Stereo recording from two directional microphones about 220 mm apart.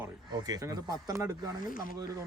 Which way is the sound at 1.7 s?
40° left (ahead or behind).